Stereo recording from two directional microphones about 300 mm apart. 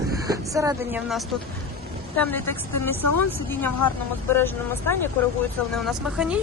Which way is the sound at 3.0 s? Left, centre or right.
Left.